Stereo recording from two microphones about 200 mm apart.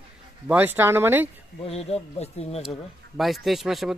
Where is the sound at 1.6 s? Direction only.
30° left (ahead or behind).